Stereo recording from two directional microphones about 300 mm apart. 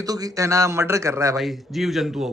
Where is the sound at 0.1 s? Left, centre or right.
Centre.